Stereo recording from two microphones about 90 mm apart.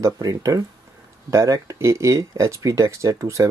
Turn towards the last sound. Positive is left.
turn(degrees=-35)  # may be behind; listen again after turning